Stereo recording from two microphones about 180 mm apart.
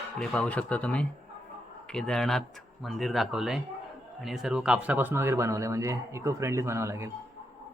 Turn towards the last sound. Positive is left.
turn(degrees=-15)  # may be behind; listen again after turning